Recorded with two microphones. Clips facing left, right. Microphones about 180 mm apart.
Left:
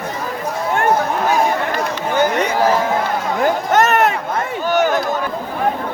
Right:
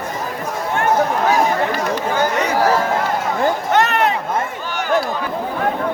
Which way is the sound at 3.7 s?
45° left (ahead or behind).